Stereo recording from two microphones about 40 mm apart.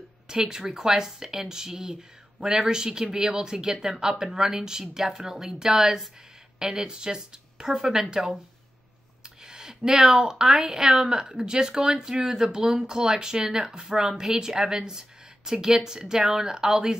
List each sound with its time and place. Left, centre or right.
0.3 s speech: centre
9.5 s a sound: centre
9.8 s speech: centre